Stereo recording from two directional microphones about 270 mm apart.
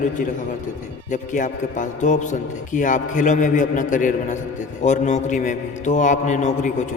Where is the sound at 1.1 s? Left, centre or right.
Left.